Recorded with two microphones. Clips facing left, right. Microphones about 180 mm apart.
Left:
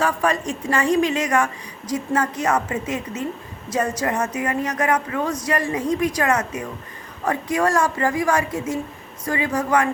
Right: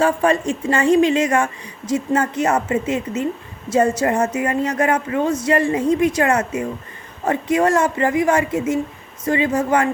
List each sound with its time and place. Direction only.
0.0 s a woman's voice: 30° right (ahead or behind)